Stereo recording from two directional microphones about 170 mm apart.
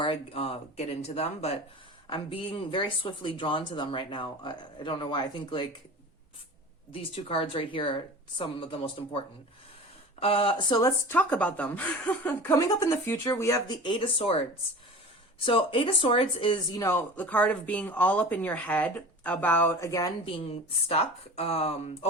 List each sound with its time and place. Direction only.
0.0 s speech: 35° left (ahead or behind)
6.9 s speech: 30° left (ahead or behind)
15.4 s speech: 30° left (ahead or behind)
16.8 s speech: 15° left (ahead or behind)
20.2 s speech: 35° left (ahead or behind)